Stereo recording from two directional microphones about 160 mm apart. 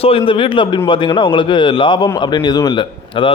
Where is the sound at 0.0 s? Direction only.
35° left (ahead or behind).